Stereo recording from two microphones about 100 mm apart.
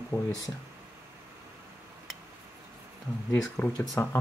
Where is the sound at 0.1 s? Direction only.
30° left (ahead or behind).